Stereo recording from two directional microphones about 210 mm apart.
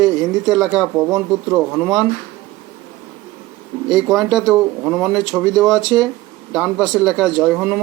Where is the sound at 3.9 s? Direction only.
Centre (ahead or behind).